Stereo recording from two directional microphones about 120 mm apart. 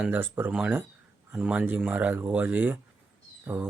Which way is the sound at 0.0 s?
15° right (ahead or behind).